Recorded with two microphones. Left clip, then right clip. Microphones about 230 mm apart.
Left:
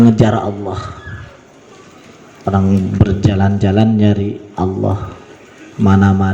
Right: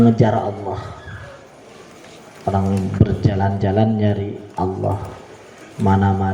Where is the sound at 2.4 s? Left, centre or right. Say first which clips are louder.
Left 4 dB; left.